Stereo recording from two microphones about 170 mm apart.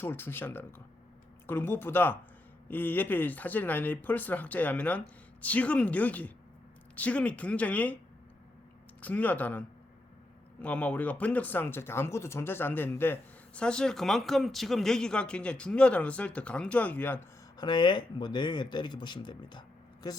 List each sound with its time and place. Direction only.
0.0 s speech: 15° left (ahead or behind)
9.0 s speech: 10° left (ahead or behind)
17.6 s speech: 25° left (ahead or behind)